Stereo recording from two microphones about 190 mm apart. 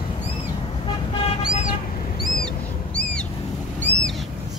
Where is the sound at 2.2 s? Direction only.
50° left (ahead or behind).